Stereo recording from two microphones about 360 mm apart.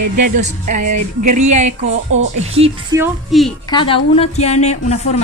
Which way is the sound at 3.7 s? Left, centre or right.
Centre.